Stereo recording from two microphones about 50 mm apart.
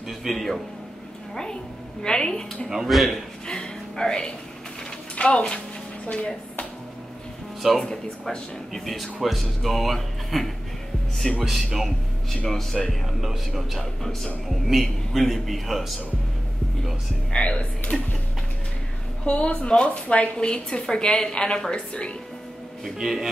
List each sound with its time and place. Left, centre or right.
0.2 s speech: centre
1.3 s a woman's voice: centre
2.7 s speech: centre
3.4 s a sound: centre
5.1 s a woman's voice: left
7.8 s speech: centre
17.3 s a woman's voice: left
19.2 s a woman's voice: left
22.9 s a man's voice: centre